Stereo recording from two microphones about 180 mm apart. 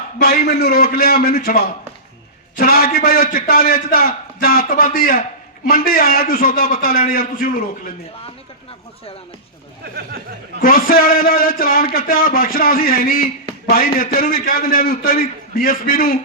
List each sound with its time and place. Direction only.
0.2 s a man's voice: 60° left (ahead or behind)
10.6 s a man's voice: 55° left (ahead or behind)